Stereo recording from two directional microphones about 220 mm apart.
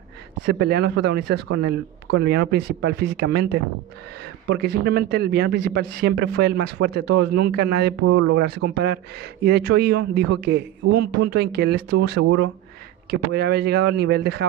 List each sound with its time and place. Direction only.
0.5 s speech: 50° right (ahead or behind)
8.0 s speech: 75° right (ahead or behind)
8.4 s speech: 45° right (ahead or behind)